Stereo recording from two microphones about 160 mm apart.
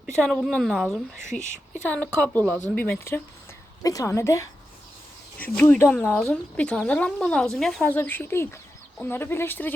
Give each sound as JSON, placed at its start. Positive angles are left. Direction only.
{"t": 0.0, "sound": "a woman's voice", "side_deg": 5}
{"t": 1.3, "sound": "speech", "side_deg": 50}
{"t": 2.2, "sound": "a woman's voice", "side_deg": 10}
{"t": 5.4, "sound": "a woman's voice", "side_deg": 10}